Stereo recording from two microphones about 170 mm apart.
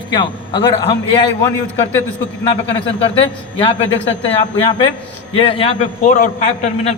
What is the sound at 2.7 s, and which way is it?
A man's voice, 30° left (ahead or behind).